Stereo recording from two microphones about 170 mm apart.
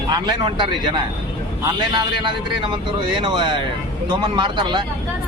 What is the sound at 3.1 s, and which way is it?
Speech, 30° right (ahead or behind).